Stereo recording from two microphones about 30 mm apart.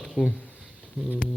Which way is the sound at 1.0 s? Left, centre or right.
Right.